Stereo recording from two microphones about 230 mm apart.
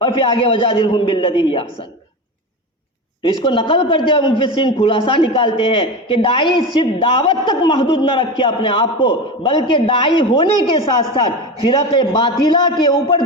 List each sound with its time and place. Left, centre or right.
0.0 s a man's voice: left
3.2 s a man's voice: left